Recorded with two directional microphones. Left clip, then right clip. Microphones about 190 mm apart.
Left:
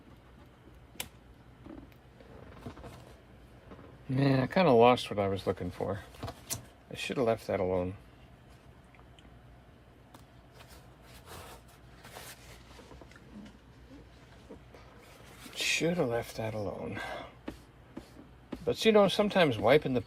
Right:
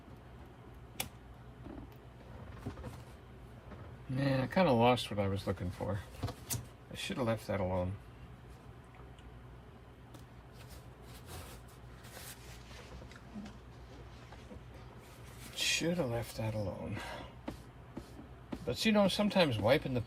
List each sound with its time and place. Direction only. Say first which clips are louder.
4.1 s speech: left 5 dB; 45° left (ahead or behind)
6.5 s a sound: left 3 dB; 45° left (ahead or behind)
15.5 s speech: left 4 dB; 40° left (ahead or behind)
18.7 s speech: left 7 dB; 40° left (ahead or behind)